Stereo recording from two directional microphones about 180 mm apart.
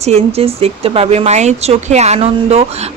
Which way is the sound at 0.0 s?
35° right (ahead or behind).